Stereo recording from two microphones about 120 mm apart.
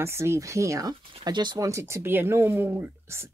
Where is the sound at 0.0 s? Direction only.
20° right (ahead or behind).